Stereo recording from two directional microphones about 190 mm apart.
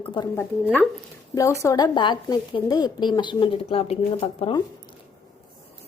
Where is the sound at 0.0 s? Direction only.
20° left (ahead or behind).